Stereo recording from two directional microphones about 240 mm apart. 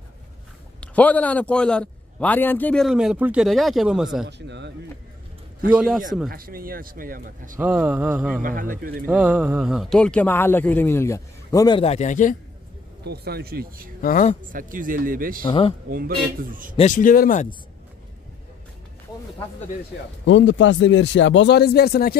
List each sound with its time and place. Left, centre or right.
0.7 s a man's voice: centre
4.3 s speech: right
5.7 s a man's voice: centre
6.3 s speech: right
7.5 s a sound: centre
8.4 s speech: right
9.0 s speech: centre; by 12.4 s left
13.0 s speech: right
14.0 s speech: left
14.4 s speech: right
15.4 s speech: left
16.3 s speech: right
16.7 s speech: left
20.2 s speech: left